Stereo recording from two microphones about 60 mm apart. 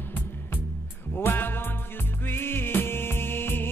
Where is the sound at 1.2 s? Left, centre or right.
Left.